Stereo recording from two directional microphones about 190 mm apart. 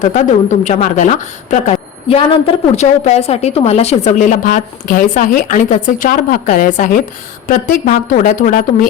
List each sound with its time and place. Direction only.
0.0 s a woman's voice: 40° left (ahead or behind)